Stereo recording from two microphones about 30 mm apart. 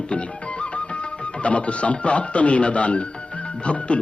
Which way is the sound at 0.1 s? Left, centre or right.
Left.